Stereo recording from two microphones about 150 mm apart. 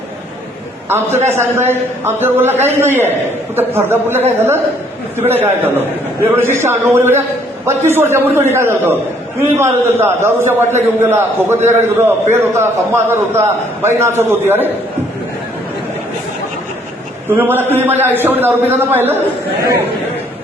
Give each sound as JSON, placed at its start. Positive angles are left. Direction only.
{"t": 1.3, "sound": "a man's voice", "side_deg": -15}
{"t": 17.2, "sound": "a man's voice", "side_deg": -10}